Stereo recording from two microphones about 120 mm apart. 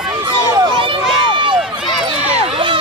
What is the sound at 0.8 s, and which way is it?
Run, 45° right (ahead or behind).